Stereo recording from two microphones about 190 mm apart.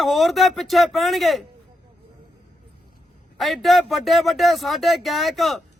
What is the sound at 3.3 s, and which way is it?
A man's voice, centre (ahead or behind).